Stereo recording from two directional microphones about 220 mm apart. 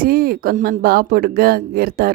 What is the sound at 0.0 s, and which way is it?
Speech, 40° right (ahead or behind).